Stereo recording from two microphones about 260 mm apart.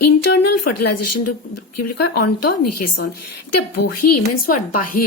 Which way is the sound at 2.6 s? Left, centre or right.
Left.